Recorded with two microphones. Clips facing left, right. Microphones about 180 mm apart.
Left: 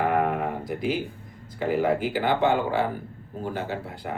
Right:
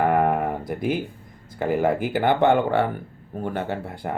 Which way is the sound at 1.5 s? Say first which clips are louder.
Right 2 dB; 50° right (ahead or behind).